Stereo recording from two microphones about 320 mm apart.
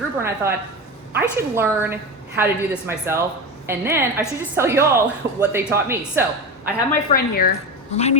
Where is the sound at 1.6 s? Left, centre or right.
Centre.